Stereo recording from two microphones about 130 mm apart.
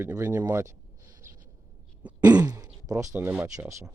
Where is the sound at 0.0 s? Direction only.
15° right (ahead or behind).